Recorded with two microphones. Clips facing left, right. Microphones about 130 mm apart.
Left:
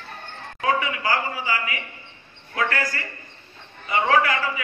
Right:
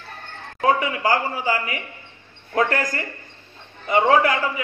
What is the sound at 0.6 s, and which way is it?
A man's voice, 45° right (ahead or behind).